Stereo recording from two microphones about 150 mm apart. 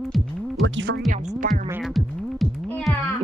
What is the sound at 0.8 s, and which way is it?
Music, 75° right (ahead or behind).